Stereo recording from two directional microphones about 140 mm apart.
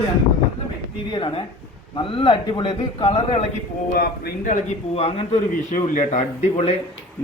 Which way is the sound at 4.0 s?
90° left.